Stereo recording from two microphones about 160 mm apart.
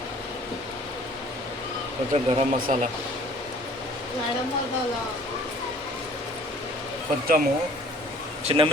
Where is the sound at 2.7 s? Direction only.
50° right (ahead or behind).